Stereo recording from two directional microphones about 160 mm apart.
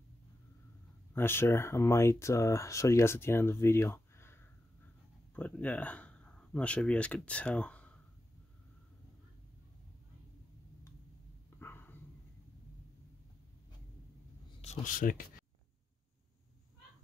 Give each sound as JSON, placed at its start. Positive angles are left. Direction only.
{"t": 1.1, "sound": "speech", "side_deg": 15}
{"t": 11.6, "sound": "a sound", "side_deg": 15}
{"t": 14.6, "sound": "speech", "side_deg": 50}